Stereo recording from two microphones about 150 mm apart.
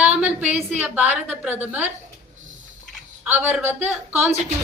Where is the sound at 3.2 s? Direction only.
15° right (ahead or behind).